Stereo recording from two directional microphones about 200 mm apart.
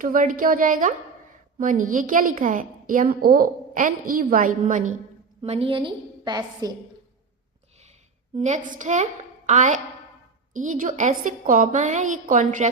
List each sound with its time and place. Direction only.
0.0 s a woman's voice: 40° right (ahead or behind)
5.4 s a woman's voice: 30° right (ahead or behind)
8.4 s a woman's voice: 35° right (ahead or behind)